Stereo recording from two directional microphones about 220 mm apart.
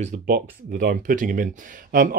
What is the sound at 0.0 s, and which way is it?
Speech, 45° right (ahead or behind).